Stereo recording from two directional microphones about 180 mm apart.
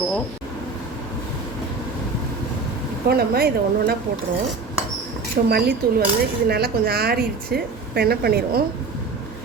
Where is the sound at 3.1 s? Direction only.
60° right (ahead or behind).